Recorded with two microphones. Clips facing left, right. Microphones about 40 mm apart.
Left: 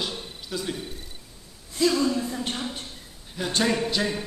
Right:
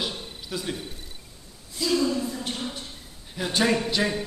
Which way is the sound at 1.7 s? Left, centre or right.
Left.